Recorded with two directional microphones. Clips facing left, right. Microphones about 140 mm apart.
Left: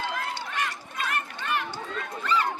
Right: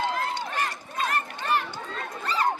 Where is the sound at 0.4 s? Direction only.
35° right (ahead or behind).